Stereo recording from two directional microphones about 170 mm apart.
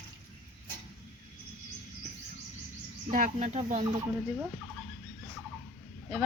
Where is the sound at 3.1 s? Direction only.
45° right (ahead or behind).